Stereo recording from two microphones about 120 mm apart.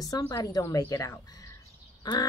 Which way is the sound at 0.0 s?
30° left (ahead or behind).